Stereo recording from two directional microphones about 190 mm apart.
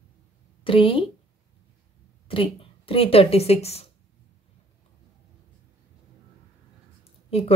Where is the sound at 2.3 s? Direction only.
30° left (ahead or behind).